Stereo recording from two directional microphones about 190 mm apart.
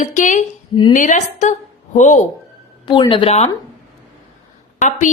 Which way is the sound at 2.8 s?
25° left (ahead or behind).